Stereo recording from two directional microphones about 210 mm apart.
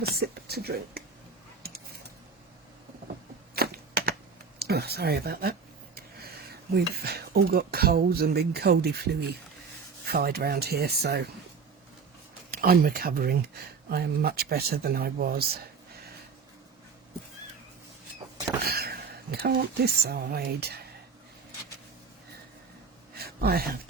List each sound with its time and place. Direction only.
0.2 s speech: 50° right (ahead or behind)
1.6 s a sound: 50° right (ahead or behind)
3.5 s typewriter: 45° right (ahead or behind)
4.6 s speech: 50° right (ahead or behind)
12.5 s speech: 45° right (ahead or behind)
18.6 s speech: 45° right (ahead or behind)
23.1 s a sound: 45° right (ahead or behind)